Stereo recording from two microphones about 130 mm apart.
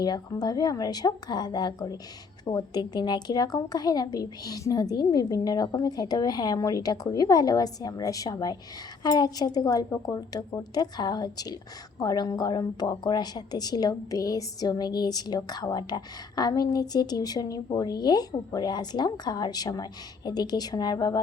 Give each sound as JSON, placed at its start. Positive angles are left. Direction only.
{"t": 0.0, "sound": "a woman's voice", "side_deg": 30}